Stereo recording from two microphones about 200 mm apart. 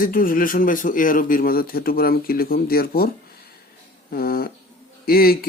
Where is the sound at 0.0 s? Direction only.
45° left (ahead or behind).